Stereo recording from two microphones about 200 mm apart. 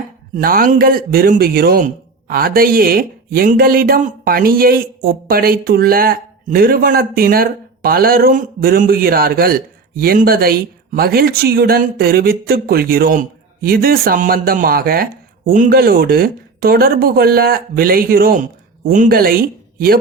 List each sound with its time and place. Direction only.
0.3 s a man's voice: 45° right (ahead or behind)